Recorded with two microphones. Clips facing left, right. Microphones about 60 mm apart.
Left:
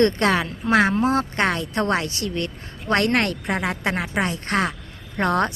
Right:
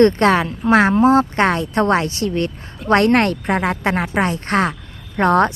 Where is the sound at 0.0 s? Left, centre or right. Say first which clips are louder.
Right 6 dB; right.